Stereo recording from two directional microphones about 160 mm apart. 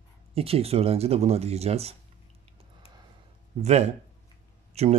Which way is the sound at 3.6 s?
45° right (ahead or behind).